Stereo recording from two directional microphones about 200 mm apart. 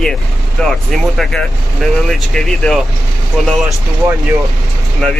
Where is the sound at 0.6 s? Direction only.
Centre (ahead or behind).